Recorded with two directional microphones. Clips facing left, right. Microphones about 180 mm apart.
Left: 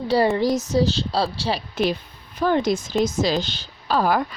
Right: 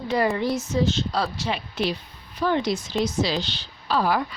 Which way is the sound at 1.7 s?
50° left (ahead or behind).